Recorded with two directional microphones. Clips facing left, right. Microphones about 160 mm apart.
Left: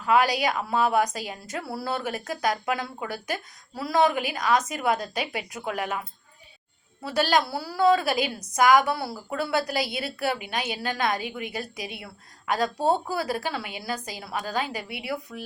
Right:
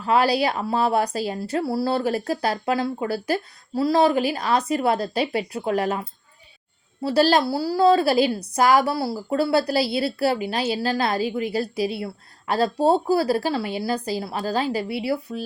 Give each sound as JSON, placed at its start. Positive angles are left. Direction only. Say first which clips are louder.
{"t": 0.0, "sound": "a woman's voice", "louder": "right 3 dB", "side_deg": -35}